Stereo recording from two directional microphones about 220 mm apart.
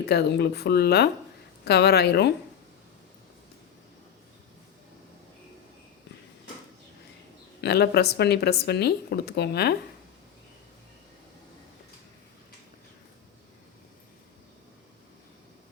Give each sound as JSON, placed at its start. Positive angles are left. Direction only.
{"t": 0.0, "sound": "speech", "side_deg": 45}
{"t": 7.6, "sound": "speech", "side_deg": 50}